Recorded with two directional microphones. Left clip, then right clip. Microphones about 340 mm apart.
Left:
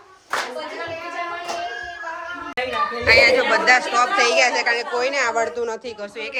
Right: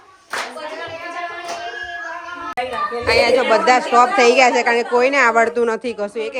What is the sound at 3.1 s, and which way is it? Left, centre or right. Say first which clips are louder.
A woman's voice: even; centre.